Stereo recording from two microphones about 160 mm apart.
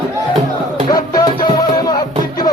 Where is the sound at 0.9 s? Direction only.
25° left (ahead or behind).